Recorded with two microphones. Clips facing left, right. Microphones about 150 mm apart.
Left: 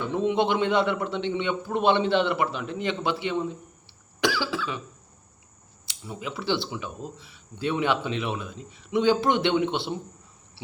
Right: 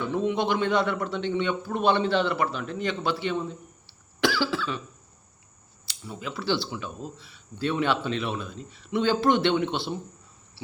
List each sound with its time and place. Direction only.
0.1 s a man's voice: 25° left (ahead or behind)
6.1 s speech: 20° left (ahead or behind)